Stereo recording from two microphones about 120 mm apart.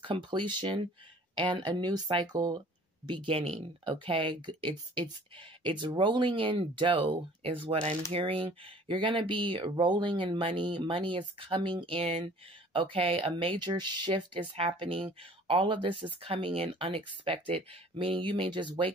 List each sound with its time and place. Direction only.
0.0 s speech: 45° right (ahead or behind)
3.1 s speech: 45° right (ahead or behind)